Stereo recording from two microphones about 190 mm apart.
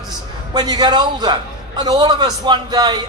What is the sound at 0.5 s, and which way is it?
A man's voice, 20° right (ahead or behind).